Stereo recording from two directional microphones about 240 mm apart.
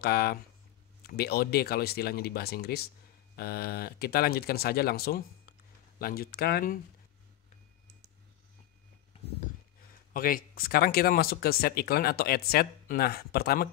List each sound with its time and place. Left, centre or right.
0.0 s speech: left
10.1 s speech: left